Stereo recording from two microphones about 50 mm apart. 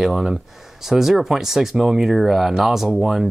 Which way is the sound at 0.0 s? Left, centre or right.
Centre.